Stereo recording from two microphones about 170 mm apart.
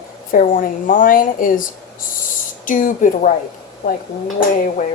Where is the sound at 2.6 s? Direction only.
50° left (ahead or behind).